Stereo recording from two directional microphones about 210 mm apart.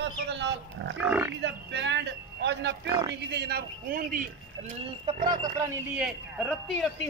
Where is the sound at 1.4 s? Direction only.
55° right (ahead or behind).